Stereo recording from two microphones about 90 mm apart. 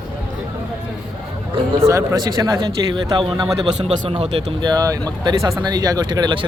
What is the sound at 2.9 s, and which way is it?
Speech, 55° right (ahead or behind).